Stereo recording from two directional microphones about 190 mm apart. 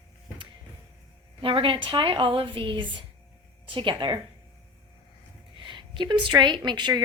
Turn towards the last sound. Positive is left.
turn(degrees=-25)  # may be behind; listen again after turning